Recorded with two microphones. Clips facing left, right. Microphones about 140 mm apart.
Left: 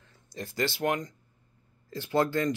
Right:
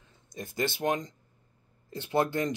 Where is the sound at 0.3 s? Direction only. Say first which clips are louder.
Left 1 dB; 20° right (ahead or behind).